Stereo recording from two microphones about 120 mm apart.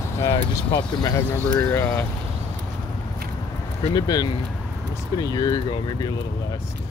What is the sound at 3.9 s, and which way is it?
Speech, 35° left (ahead or behind).